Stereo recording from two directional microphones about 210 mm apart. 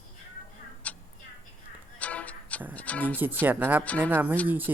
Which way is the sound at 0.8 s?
5° left (ahead or behind).